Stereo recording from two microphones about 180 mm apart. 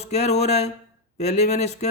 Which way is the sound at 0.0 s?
35° left (ahead or behind).